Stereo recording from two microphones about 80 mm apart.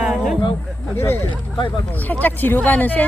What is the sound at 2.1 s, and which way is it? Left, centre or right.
Speech, left.